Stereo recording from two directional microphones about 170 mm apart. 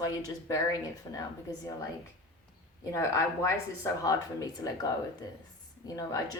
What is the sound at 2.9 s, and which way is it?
A woman's voice, 15° left (ahead or behind).